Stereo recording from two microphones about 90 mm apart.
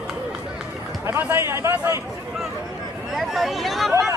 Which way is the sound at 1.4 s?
30° right (ahead or behind).